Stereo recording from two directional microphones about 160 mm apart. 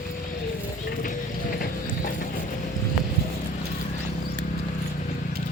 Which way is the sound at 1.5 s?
65° left (ahead or behind).